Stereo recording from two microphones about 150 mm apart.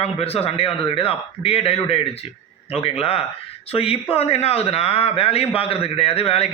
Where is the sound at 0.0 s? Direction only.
40° left (ahead or behind).